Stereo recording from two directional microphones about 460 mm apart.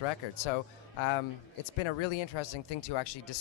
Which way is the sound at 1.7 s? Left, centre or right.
Left.